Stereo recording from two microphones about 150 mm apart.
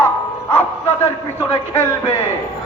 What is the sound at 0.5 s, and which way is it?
Speech, 10° left (ahead or behind).